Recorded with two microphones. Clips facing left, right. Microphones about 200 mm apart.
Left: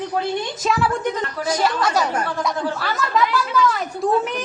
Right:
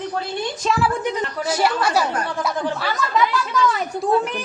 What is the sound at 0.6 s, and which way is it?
A woman's voice, 5° right (ahead or behind).